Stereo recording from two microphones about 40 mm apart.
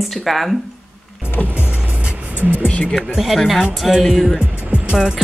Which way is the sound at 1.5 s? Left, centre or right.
Right.